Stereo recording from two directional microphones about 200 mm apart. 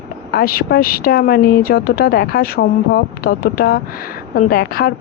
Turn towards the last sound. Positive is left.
turn(degrees=50)  # may be behind; listen again after turning